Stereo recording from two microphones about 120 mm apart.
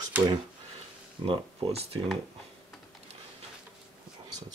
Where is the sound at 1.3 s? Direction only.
50° right (ahead or behind).